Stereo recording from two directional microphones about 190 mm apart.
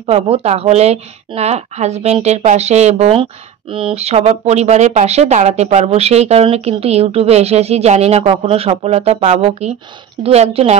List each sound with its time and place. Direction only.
0.0 s speech: 30° right (ahead or behind)